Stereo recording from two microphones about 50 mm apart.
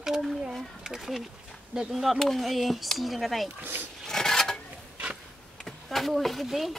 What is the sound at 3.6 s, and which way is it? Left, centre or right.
Speech, right.